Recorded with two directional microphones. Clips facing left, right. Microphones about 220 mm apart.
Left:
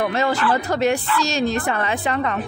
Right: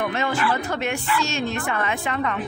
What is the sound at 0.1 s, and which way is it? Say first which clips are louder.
A woman's voice: left 4 dB; 40° left (ahead or behind).